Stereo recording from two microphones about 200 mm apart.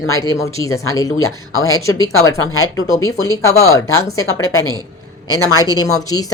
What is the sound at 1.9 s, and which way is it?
Speech, 15° left (ahead or behind).